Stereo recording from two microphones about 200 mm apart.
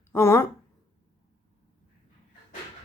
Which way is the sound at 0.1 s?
15° left (ahead or behind).